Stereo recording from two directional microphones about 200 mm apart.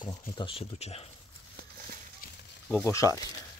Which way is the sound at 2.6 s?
10° left (ahead or behind).